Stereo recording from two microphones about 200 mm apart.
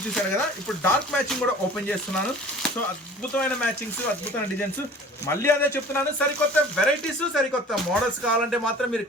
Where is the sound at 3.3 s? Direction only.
5° left (ahead or behind).